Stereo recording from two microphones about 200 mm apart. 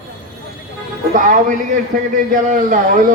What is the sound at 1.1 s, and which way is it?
A man's voice, 40° right (ahead or behind).